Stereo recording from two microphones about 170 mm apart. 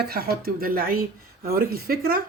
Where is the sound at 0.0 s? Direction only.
65° right (ahead or behind).